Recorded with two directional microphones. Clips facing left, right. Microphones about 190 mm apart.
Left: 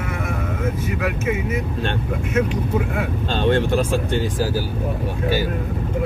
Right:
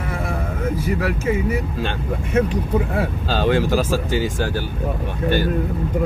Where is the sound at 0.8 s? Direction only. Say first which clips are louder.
Right 2 dB; 35° right (ahead or behind).